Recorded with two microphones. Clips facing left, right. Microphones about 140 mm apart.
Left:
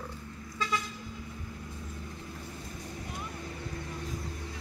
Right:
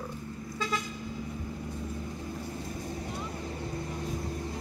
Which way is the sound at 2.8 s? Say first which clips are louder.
Right 4 dB; 30° right (ahead or behind).